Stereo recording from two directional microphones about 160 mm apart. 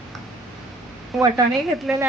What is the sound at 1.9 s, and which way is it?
Speech, 5° right (ahead or behind).